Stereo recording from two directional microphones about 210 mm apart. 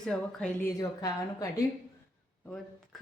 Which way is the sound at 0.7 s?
15° left (ahead or behind).